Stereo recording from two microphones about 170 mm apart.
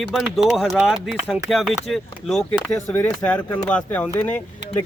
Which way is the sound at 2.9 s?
10° left (ahead or behind).